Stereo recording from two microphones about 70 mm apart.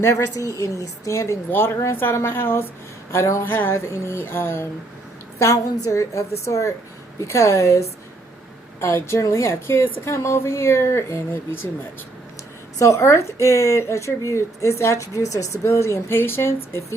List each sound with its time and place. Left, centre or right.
0.0 s a woman's voice: left
0.3 s a woman's voice: left
1.5 s a woman's voice: left
3.1 s a woman's voice: left
3.4 s a woman's voice: left
5.4 s a woman's voice: left
12.8 s a woman's voice: left